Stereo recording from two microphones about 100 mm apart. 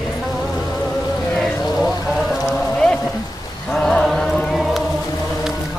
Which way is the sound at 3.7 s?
5° left (ahead or behind).